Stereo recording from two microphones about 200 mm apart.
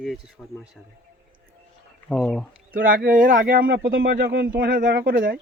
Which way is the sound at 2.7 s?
45° right (ahead or behind).